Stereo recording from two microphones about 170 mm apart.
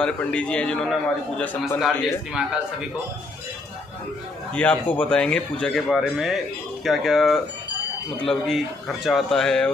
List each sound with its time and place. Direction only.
0.0 s a man's voice: 5° left (ahead or behind)
1.8 s a man's voice: centre (ahead or behind)
4.6 s a man's voice: 10° left (ahead or behind)